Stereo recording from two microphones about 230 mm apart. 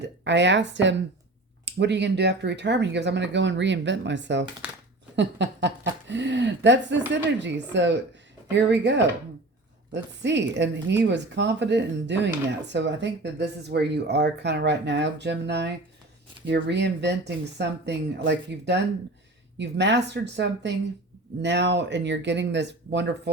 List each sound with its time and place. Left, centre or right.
0.0 s a woman's voice: right